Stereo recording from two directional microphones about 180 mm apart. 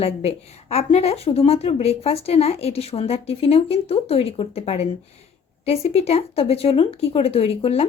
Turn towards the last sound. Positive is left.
turn(degrees=35)  # may be behind; listen again after turning